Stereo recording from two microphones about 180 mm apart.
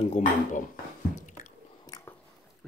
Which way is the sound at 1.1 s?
45° left (ahead or behind).